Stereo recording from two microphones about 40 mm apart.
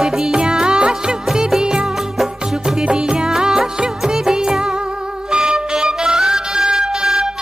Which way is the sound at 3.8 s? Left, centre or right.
Centre.